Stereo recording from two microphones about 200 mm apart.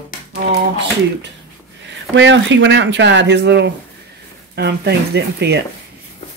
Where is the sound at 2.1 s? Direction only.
65° right (ahead or behind).